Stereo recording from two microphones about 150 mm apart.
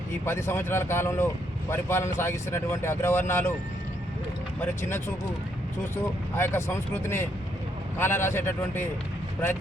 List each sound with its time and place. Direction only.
0.3 s speech: 15° left (ahead or behind)
4.6 s speech: 15° left (ahead or behind)
6.3 s speech: 15° left (ahead or behind)